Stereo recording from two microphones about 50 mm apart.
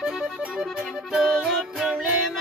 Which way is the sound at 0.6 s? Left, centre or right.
Centre.